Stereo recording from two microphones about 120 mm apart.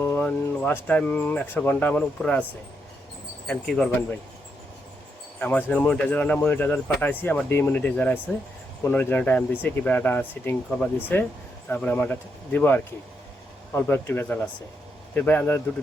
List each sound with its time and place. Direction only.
0.0 s speech: 15° left (ahead or behind)
3.4 s speech: 5° left (ahead or behind)
5.4 s speech: 15° left (ahead or behind)